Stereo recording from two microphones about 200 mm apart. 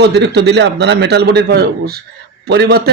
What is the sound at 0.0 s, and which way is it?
A man's voice, 55° right (ahead or behind).